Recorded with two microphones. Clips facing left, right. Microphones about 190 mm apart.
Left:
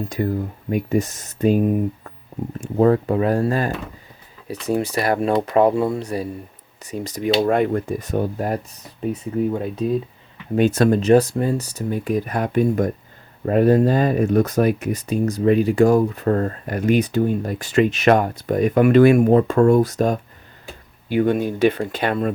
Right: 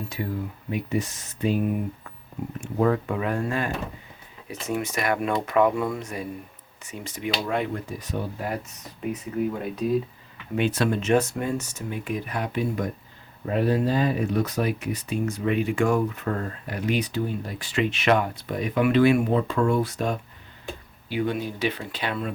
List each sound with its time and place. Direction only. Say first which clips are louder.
0.1 s speech: left 7 dB; 45° left (ahead or behind)
10.5 s speech: left 8 dB; 45° left (ahead or behind)